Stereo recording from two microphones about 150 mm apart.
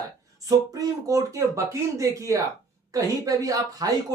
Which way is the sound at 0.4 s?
25° right (ahead or behind).